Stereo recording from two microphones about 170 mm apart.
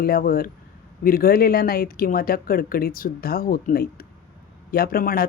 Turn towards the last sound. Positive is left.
turn(degrees=60)  # may be behind; listen again after turning